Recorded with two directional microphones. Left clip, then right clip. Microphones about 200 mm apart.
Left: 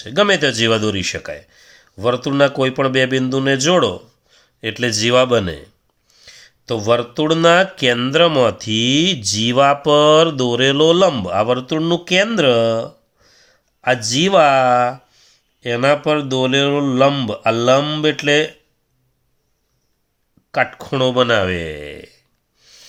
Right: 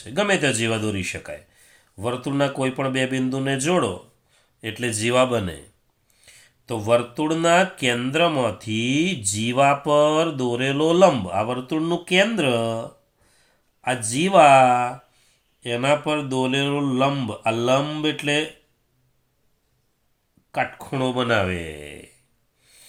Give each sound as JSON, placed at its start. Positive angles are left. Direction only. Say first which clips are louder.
{"t": 0.0, "sound": "speech", "louder": "left 6 dB", "side_deg": 55}
{"t": 13.3, "sound": "a sound", "louder": "left 9 dB", "side_deg": 55}
{"t": 14.1, "sound": "speech", "louder": "even", "side_deg": 50}
{"t": 20.5, "sound": "speech", "louder": "left 7 dB", "side_deg": 55}